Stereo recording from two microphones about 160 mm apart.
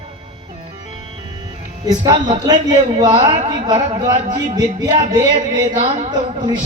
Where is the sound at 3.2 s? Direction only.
45° right (ahead or behind).